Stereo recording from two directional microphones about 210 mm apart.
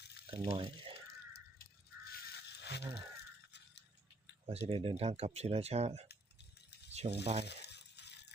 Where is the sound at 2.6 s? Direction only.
55° left (ahead or behind).